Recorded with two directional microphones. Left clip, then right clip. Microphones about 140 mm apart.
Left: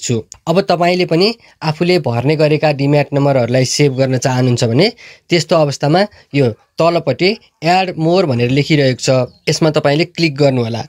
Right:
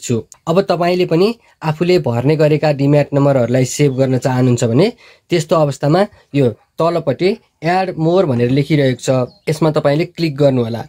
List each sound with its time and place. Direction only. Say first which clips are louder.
0.0 s speech: left 1 dB; 35° left (ahead or behind)